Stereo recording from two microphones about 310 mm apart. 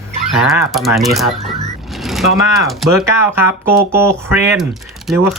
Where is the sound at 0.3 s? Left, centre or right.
Centre.